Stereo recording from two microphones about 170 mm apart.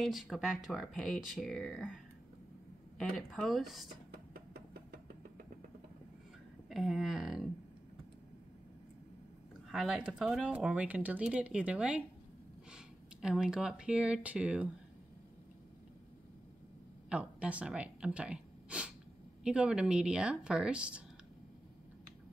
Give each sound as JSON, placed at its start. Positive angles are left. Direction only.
{"t": 0.0, "sound": "speech", "side_deg": 0}
{"t": 3.2, "sound": "speech", "side_deg": 0}
{"t": 4.1, "sound": "a sound", "side_deg": -65}
{"t": 6.7, "sound": "speech", "side_deg": 0}
{"t": 9.7, "sound": "speech", "side_deg": -5}
{"t": 17.1, "sound": "speech", "side_deg": -5}